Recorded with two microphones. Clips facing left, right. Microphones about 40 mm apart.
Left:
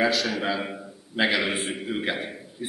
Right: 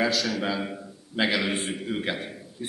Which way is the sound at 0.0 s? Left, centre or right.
Centre.